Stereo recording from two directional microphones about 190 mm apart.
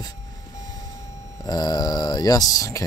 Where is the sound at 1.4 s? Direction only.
20° left (ahead or behind).